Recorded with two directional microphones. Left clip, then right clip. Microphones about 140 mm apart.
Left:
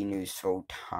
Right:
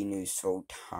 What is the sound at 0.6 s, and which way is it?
Speech, 30° right (ahead or behind).